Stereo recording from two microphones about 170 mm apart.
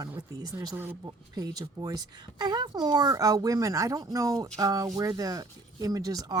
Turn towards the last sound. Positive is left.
turn(degrees=-20)  # may be behind; listen again after turning